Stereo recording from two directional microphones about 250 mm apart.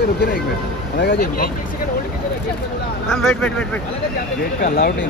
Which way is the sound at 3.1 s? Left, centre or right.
Centre.